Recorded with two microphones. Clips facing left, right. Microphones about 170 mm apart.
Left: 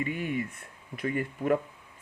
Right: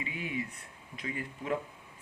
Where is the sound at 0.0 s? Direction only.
55° left (ahead or behind).